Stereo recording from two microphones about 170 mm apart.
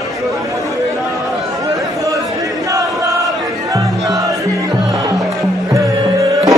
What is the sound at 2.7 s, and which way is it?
Crowd, 20° right (ahead or behind).